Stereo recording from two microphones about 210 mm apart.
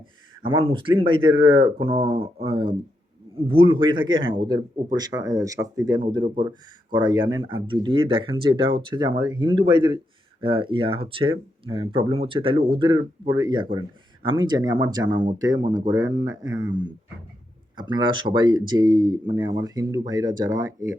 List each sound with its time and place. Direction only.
0.4 s speech: 25° right (ahead or behind)